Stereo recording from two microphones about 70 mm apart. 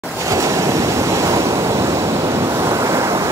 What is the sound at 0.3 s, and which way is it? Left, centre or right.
Waves, right.